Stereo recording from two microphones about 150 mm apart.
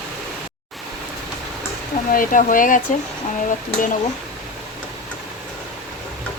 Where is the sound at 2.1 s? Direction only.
65° left (ahead or behind).